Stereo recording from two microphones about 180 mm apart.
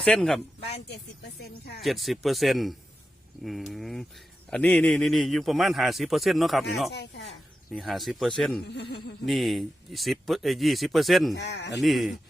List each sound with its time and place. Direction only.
0.0 s a man's voice: 5° left (ahead or behind)
1.4 s speech: 65° left (ahead or behind)
1.8 s a man's voice: centre (ahead or behind)
8.6 s speech: 70° left (ahead or behind)
9.2 s a man's voice: centre (ahead or behind)
11.3 s speech: 70° left (ahead or behind)
11.8 s a man's voice: centre (ahead or behind)